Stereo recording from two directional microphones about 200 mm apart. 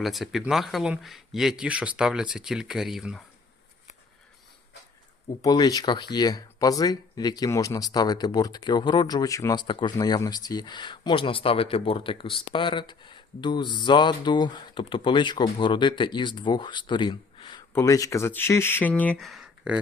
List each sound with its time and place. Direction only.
0.0 s speech: centre (ahead or behind)
5.4 s speech: 20° left (ahead or behind); by 19.8 s 5° right (ahead or behind)